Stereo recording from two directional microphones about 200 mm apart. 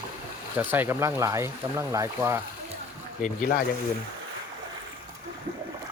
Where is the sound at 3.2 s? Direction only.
40° left (ahead or behind).